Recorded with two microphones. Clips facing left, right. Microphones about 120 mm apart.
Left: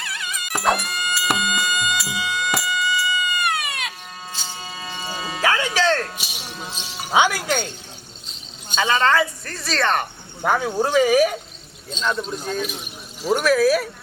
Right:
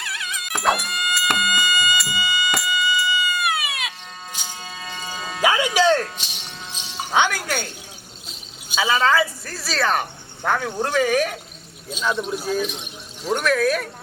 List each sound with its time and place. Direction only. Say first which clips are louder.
0.0 s music: even; centre (ahead or behind)
5.4 s music: right 2 dB; 15° right (ahead or behind)
6.1 s music: left 3 dB; 10° left (ahead or behind)
7.4 s a woman's voice: left 3 dB; 10° right (ahead or behind)
10.4 s speech: left 3 dB; 5° left (ahead or behind)
11.9 s speech: right 1 dB; 10° right (ahead or behind)